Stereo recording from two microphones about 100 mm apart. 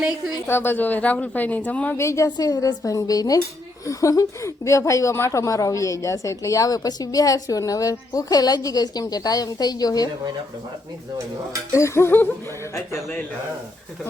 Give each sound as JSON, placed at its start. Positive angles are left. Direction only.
{"t": 0.4, "sound": "a woman's voice", "side_deg": 20}
{"t": 2.0, "sound": "a woman's voice", "side_deg": 30}
{"t": 11.7, "sound": "a sound", "side_deg": 30}